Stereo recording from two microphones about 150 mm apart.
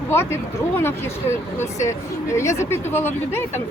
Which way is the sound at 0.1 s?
15° left (ahead or behind).